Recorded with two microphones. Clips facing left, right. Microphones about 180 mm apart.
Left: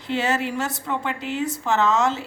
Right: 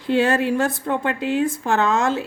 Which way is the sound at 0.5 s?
55° right (ahead or behind).